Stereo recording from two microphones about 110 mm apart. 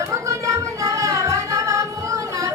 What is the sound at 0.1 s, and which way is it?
Music, 30° right (ahead or behind).